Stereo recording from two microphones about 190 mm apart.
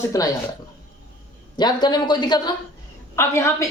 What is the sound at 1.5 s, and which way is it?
A woman's voice, 20° left (ahead or behind).